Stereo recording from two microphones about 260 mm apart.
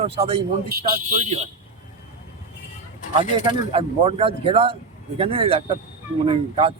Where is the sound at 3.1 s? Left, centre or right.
Centre.